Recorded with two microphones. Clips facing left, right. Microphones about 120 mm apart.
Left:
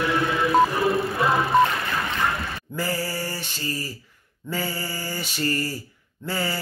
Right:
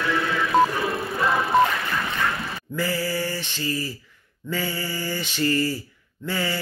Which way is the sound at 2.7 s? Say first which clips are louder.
Right 2 dB; 40° left (ahead or behind).